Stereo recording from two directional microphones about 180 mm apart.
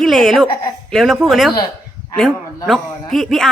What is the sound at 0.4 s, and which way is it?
Speech, 25° left (ahead or behind).